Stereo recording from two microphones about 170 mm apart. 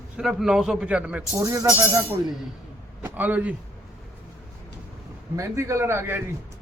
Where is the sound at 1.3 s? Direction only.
20° right (ahead or behind).